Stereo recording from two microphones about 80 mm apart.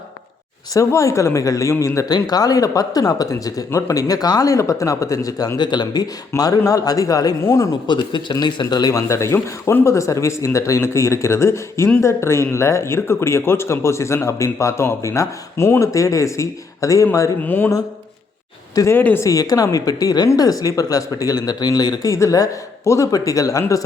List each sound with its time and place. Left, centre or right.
0.7 s speech: left
2.0 s speech: left
5.5 s speech: left
7.9 s speech: left
17.4 s speech: left
18.9 s speech: left
19.2 s speech: left
22.1 s speech: left